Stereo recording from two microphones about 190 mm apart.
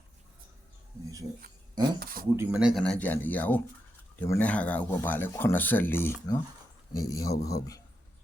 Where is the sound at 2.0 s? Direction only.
50° right (ahead or behind).